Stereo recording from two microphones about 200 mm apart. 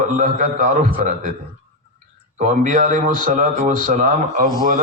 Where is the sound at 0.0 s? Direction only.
40° right (ahead or behind).